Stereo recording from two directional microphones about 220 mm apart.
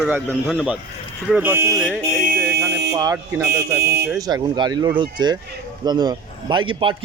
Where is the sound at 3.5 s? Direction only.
50° right (ahead or behind).